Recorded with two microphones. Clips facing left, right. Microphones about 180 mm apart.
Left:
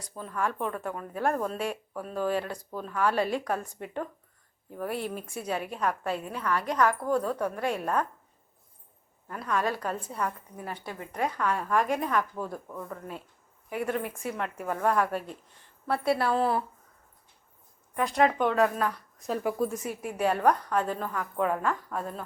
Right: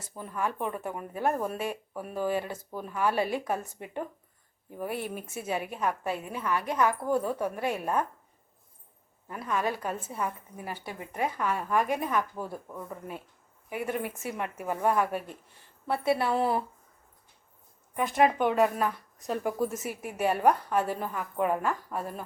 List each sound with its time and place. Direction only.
0.0 s a woman's voice: 15° right (ahead or behind)
9.2 s a woman's voice: 10° right (ahead or behind)
16.4 s speech: 20° right (ahead or behind)
17.9 s a woman's voice: centre (ahead or behind)